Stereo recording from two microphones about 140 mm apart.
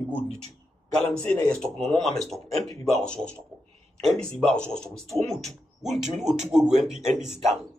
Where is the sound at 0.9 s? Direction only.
5° left (ahead or behind).